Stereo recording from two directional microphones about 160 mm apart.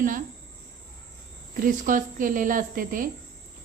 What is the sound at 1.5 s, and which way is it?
Speech, 55° right (ahead or behind).